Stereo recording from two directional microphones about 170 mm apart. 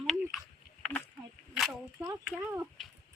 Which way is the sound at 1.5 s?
Centre (ahead or behind).